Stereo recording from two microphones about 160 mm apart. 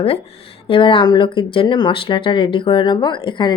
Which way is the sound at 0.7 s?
35° left (ahead or behind).